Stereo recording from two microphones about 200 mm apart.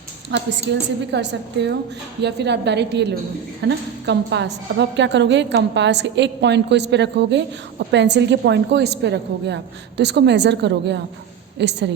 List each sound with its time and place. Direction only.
0.3 s a woman's voice: 60° right (ahead or behind)